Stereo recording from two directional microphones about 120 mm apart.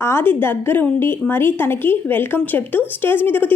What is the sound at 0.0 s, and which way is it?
A woman's voice, 20° left (ahead or behind).